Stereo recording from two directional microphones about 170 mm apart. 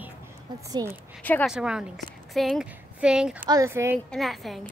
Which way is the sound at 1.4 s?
5° right (ahead or behind).